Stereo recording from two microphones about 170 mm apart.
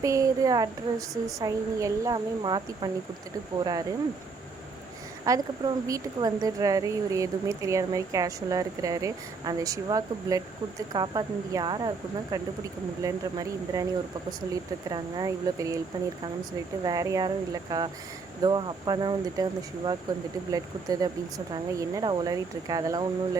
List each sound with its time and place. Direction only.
0.0 s speech: 20° right (ahead or behind)
5.2 s speech: 20° right (ahead or behind)